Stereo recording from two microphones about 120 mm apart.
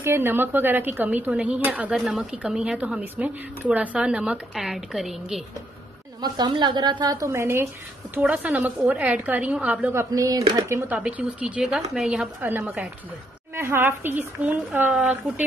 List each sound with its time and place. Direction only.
0.0 s a woman's voice: 20° right (ahead or behind)
2.0 s a woman's voice: 5° right (ahead or behind)
6.2 s a woman's voice: 35° right (ahead or behind)
7.2 s a woman's voice: 20° right (ahead or behind)
8.1 s a woman's voice: 10° right (ahead or behind)
10.1 s a woman's voice: 30° right (ahead or behind)
10.9 s a woman's voice: 10° right (ahead or behind)
12.4 s a woman's voice: 15° right (ahead or behind)